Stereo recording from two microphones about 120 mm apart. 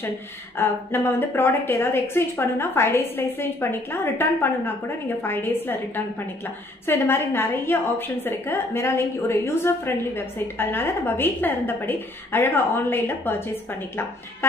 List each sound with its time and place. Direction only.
0.6 s a woman's voice: 20° left (ahead or behind)